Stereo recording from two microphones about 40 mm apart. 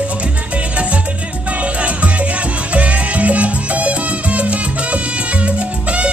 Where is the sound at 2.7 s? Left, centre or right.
Right.